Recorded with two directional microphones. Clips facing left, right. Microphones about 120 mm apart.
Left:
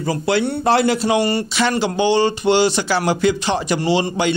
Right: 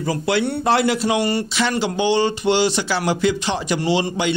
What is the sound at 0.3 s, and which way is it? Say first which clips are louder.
Speech: left 2 dB; 35° left (ahead or behind).